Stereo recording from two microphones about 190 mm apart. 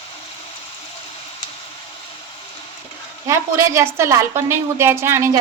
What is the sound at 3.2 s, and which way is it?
A woman's voice, 15° right (ahead or behind).